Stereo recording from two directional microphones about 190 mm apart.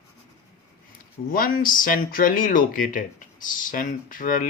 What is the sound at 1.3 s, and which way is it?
Speech, 45° left (ahead or behind).